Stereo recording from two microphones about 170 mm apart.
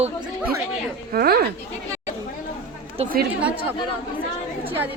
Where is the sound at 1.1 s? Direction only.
60° right (ahead or behind).